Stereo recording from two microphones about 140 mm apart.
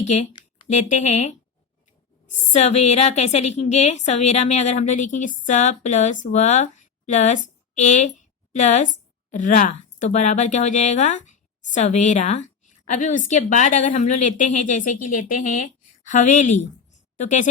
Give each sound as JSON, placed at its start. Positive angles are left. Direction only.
{"t": 0.0, "sound": "a woman's voice", "side_deg": 55}